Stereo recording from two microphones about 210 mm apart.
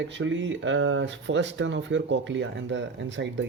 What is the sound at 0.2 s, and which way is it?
Speech, 60° right (ahead or behind).